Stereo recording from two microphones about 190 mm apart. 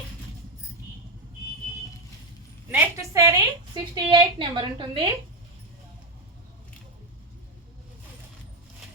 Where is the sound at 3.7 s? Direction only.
25° right (ahead or behind).